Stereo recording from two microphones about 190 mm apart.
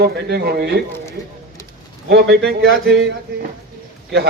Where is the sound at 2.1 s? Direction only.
60° right (ahead or behind).